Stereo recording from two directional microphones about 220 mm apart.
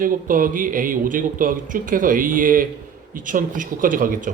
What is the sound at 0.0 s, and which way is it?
Speech, 40° right (ahead or behind).